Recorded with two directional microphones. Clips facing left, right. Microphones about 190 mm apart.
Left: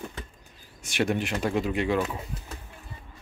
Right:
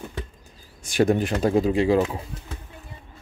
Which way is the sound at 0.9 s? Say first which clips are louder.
Right 6 dB; 35° right (ahead or behind).